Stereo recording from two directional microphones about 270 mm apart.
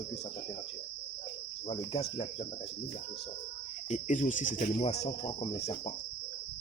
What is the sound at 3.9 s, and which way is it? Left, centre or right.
Cricket, left.